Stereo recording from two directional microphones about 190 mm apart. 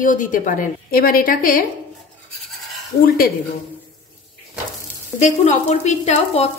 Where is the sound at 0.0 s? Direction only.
45° left (ahead or behind).